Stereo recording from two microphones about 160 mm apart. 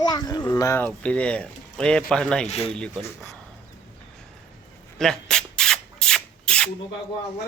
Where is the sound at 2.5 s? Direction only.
40° left (ahead or behind).